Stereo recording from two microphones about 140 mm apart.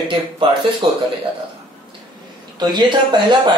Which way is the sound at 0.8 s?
40° right (ahead or behind).